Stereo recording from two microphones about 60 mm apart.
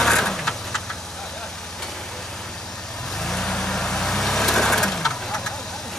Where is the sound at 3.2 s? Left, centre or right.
Centre.